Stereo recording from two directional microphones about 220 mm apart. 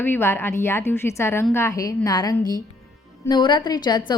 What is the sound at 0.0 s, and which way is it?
A woman's voice, 10° left (ahead or behind).